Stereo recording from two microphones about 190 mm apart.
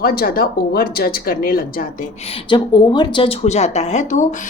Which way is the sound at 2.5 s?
25° left (ahead or behind).